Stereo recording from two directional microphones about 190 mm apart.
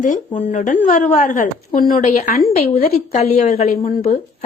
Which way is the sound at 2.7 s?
30° left (ahead or behind).